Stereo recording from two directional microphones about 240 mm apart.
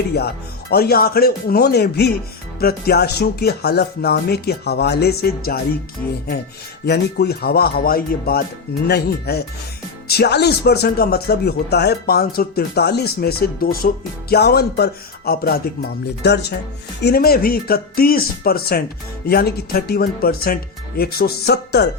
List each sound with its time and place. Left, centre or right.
0.7 s speech: left
6.8 s speech: left